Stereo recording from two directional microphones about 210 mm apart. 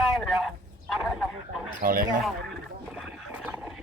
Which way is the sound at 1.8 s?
40° right (ahead or behind).